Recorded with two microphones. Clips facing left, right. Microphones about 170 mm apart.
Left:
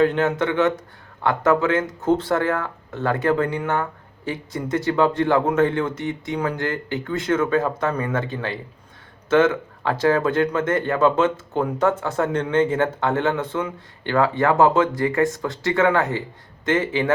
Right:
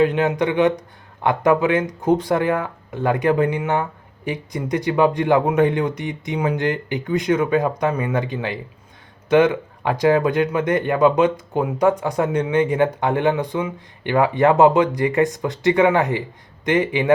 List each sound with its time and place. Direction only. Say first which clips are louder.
0.0 s speech: right 1 dB; 15° right (ahead or behind)